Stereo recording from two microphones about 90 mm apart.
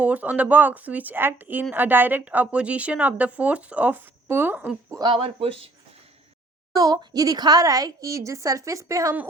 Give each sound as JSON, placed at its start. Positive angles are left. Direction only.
{"t": 0.0, "sound": "a woman's voice", "side_deg": -15}
{"t": 5.1, "sound": "speech", "side_deg": -90}
{"t": 6.7, "sound": "a woman's voice", "side_deg": -50}